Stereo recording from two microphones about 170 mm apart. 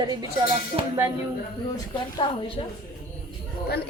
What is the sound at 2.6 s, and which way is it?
Speech, 35° left (ahead or behind).